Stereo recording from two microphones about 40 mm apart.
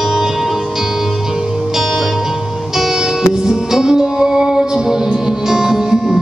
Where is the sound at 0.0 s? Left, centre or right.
Centre.